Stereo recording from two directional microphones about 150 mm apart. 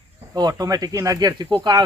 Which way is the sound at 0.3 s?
25° right (ahead or behind).